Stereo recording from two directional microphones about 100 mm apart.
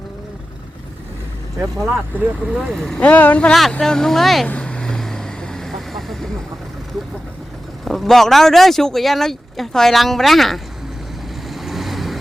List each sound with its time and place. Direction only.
2.1 s speech: 15° right (ahead or behind)
2.6 s speech: centre (ahead or behind)
3.0 s speech: 15° left (ahead or behind)
4.4 s vehicle: 10° left (ahead or behind)
7.9 s speech: centre (ahead or behind)
11.4 s vehicle: centre (ahead or behind)